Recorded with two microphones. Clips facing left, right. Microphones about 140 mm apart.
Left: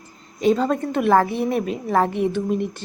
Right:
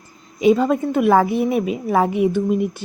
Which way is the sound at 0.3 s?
10° right (ahead or behind).